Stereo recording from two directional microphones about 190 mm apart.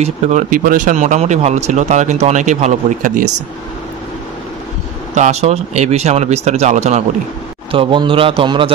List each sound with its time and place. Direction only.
0.0 s speech: 40° right (ahead or behind)
5.1 s speech: 35° right (ahead or behind)
7.7 s a man's voice: 25° right (ahead or behind)